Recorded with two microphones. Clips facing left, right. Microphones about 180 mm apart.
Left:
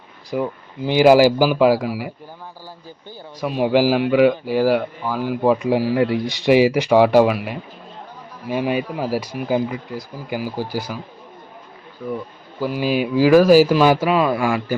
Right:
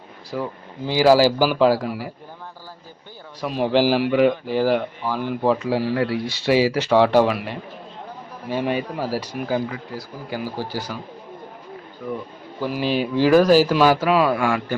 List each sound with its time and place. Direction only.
0.3 s speech: 15° left (ahead or behind)
3.4 s speech: 5° left (ahead or behind)
12.5 s speech: 5° left (ahead or behind)